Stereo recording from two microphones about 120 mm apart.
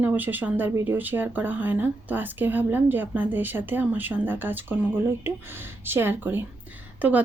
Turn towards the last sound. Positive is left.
turn(degrees=-15)  # may be behind; listen again after turning